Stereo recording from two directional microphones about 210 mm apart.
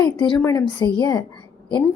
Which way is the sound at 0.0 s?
20° left (ahead or behind).